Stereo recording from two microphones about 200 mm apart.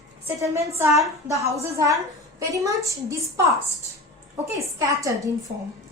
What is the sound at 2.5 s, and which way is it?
Speech, 15° right (ahead or behind).